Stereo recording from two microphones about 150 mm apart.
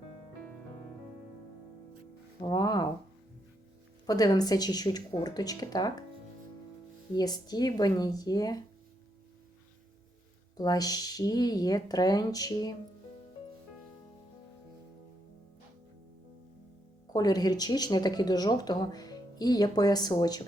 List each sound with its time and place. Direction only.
2.4 s speech: 30° left (ahead or behind)
4.0 s speech: 25° left (ahead or behind)
7.2 s speech: 25° left (ahead or behind)
10.6 s speech: 25° left (ahead or behind)
17.1 s speech: 25° left (ahead or behind)